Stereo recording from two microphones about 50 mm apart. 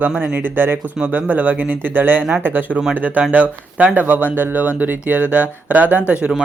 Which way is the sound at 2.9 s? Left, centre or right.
Right.